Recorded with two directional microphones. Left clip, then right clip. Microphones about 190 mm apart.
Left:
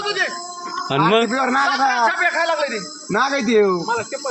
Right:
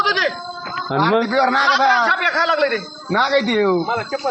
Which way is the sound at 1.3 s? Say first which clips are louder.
Right 3 dB; 35° right (ahead or behind).